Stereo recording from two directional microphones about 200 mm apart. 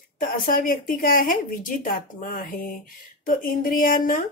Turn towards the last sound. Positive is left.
turn(degrees=40)  # may be behind; listen again after turning